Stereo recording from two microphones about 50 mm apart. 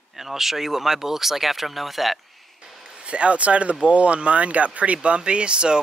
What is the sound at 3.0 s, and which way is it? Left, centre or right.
Speech, right.